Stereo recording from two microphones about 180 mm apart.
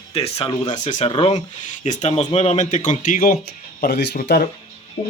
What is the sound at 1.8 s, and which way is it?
Speech, 40° left (ahead or behind).